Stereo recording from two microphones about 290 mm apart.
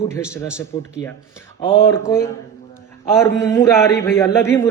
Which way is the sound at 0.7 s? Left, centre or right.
Centre.